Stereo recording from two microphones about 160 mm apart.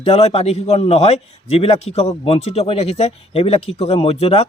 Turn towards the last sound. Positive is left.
turn(degrees=40)  # may be behind; listen again after turning